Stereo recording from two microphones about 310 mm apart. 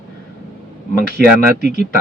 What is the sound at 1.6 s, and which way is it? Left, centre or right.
Speech, left.